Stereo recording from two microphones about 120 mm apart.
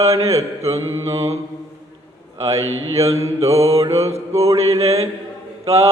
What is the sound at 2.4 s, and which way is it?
Mantra, 25° right (ahead or behind).